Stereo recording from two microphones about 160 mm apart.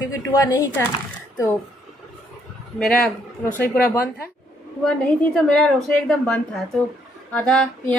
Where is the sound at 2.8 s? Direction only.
5° left (ahead or behind).